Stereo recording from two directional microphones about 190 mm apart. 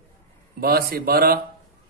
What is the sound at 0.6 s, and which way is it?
Speech, 55° right (ahead or behind).